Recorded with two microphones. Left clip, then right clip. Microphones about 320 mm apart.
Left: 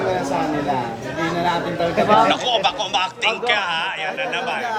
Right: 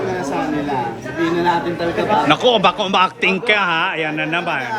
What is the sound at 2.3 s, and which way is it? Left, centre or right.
Speech, centre.